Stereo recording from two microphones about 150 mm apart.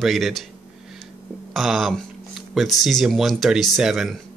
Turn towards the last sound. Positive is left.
turn(degrees=0)  # may be behind; listen again after turning